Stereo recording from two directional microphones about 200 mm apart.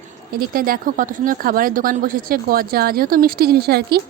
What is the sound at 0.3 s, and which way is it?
A woman's voice, 45° right (ahead or behind).